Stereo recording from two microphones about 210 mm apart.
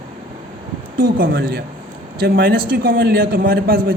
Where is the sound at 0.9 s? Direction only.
45° right (ahead or behind).